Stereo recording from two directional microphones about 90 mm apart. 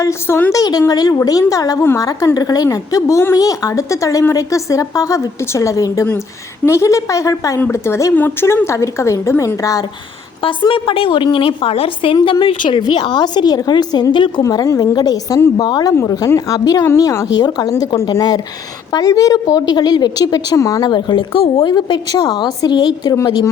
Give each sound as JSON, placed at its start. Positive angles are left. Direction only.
{"t": 0.0, "sound": "a woman's voice", "side_deg": 30}
{"t": 0.5, "sound": "a woman's voice", "side_deg": 45}
{"t": 9.6, "sound": "a woman's voice", "side_deg": 40}
{"t": 10.4, "sound": "a woman's voice", "side_deg": 70}
{"t": 12.8, "sound": "a woman's voice", "side_deg": 55}
{"t": 14.4, "sound": "a woman's voice", "side_deg": 40}
{"t": 17.0, "sound": "a woman's voice", "side_deg": 40}
{"t": 20.8, "sound": "a woman's voice", "side_deg": 55}
{"t": 21.7, "sound": "a woman's voice", "side_deg": 55}